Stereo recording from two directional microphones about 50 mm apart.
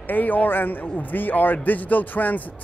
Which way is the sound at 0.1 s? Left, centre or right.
Left.